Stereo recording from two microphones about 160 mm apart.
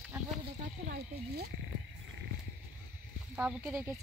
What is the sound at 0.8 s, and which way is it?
Speech, 70° right (ahead or behind).